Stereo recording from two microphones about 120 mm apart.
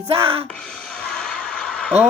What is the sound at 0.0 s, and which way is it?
Speech, 50° right (ahead or behind).